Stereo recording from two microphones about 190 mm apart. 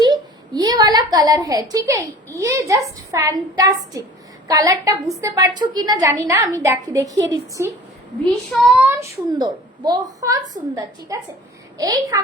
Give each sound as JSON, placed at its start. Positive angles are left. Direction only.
{"t": 0.0, "sound": "a woman's voice", "side_deg": -20}
{"t": 8.2, "sound": "a woman's voice", "side_deg": -5}
{"t": 11.8, "sound": "a woman's voice", "side_deg": -20}